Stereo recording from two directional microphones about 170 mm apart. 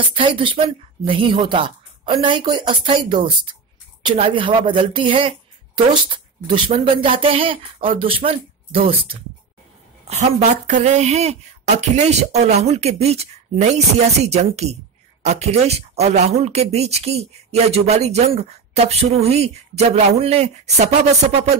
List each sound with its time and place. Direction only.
0.1 s speech: 30° right (ahead or behind)
10.0 s speech: 45° right (ahead or behind)